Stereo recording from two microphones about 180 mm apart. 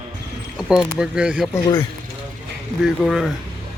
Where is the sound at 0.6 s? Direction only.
5° right (ahead or behind).